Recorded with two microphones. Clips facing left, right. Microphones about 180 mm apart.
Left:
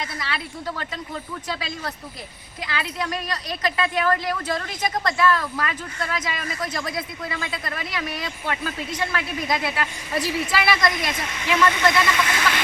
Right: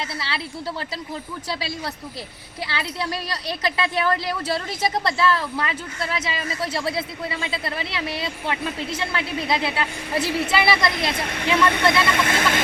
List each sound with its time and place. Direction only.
0.0 s a woman's voice: 30° right (ahead or behind)
2.6 s a woman's voice: 30° right (ahead or behind)
10.2 s speech: 65° right (ahead or behind)
10.5 s a woman's voice: 30° right (ahead or behind)
11.1 s speech: 60° right (ahead or behind)